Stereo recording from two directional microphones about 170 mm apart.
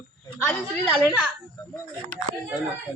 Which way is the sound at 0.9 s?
Centre (ahead or behind).